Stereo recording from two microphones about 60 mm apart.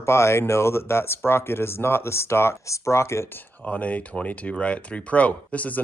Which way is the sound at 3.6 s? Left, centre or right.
Left.